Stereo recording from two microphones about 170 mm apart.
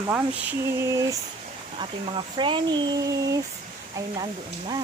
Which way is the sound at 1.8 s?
30° right (ahead or behind).